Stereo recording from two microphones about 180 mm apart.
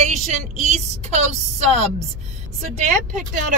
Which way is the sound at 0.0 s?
40° right (ahead or behind).